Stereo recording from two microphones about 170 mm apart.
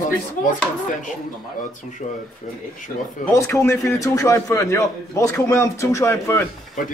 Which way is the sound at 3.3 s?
15° left (ahead or behind).